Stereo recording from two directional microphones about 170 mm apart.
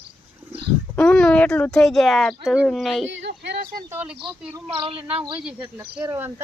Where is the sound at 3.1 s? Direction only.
90° right; by 3.7 s 75° right (ahead or behind).